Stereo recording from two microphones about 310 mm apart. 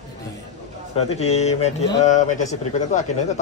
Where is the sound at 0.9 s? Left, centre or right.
Centre.